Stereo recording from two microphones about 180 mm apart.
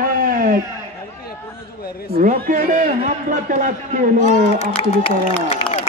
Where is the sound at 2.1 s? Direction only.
45° right (ahead or behind).